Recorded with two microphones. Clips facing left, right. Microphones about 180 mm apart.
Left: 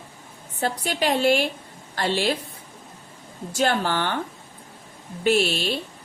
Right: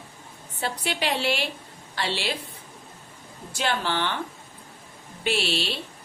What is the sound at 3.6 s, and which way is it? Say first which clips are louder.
Speech: left 4 dB; 45° left (ahead or behind).